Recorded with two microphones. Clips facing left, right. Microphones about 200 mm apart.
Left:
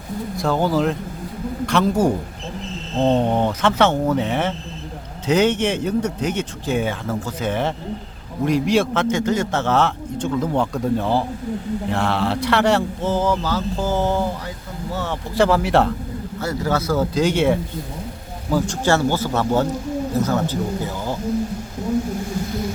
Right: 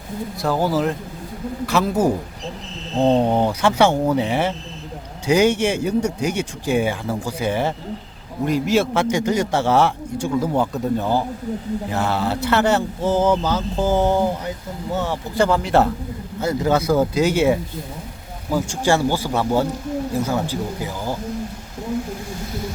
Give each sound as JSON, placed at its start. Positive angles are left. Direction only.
{"t": 0.3, "sound": "mantra", "side_deg": -5}
{"t": 1.6, "sound": "a man's voice", "side_deg": -5}
{"t": 11.9, "sound": "mantra", "side_deg": -5}
{"t": 13.1, "sound": "a man's voice", "side_deg": -20}
{"t": 15.4, "sound": "mantra", "side_deg": 5}
{"t": 16.4, "sound": "a man's voice", "side_deg": -20}